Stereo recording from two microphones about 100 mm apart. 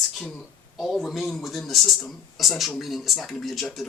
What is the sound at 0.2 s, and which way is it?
Speech, 5° left (ahead or behind).